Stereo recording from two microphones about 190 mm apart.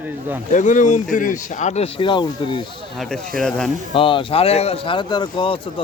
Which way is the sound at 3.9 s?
25° left (ahead or behind).